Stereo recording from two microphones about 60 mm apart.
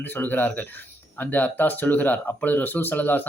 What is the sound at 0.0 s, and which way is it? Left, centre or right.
Speech, left.